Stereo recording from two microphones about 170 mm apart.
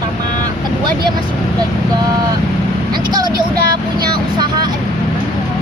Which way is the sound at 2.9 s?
25° right (ahead or behind).